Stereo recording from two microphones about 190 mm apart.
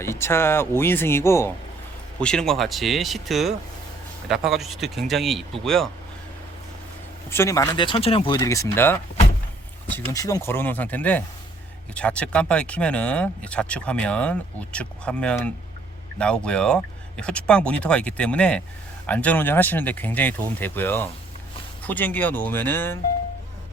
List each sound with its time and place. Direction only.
0.0 s speech: 15° left (ahead or behind)
7.3 s speech: 15° left (ahead or behind)